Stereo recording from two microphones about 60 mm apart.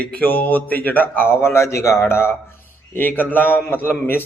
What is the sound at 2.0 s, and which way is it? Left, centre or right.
Speech, left.